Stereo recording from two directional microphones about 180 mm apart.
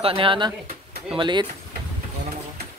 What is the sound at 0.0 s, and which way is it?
Speech, 30° right (ahead or behind).